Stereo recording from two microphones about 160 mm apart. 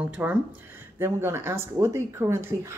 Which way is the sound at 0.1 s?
10° right (ahead or behind).